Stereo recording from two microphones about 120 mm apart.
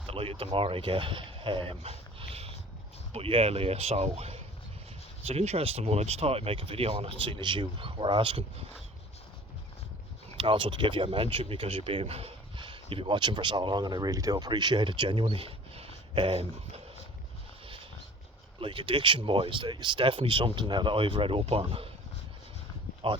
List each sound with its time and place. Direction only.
0.1 s speech: 50° right (ahead or behind)
10.3 s speech: 45° right (ahead or behind)
18.6 s speech: 45° right (ahead or behind)